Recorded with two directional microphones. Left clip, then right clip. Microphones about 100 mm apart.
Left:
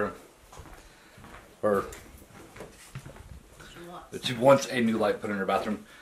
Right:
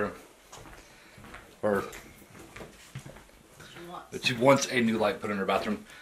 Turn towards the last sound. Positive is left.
turn(degrees=0)  # may be behind; listen again after turning